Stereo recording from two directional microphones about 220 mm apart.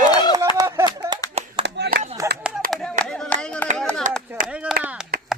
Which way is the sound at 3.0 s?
5° left (ahead or behind).